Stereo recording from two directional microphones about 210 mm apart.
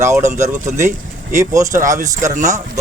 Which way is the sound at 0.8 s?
35° right (ahead or behind).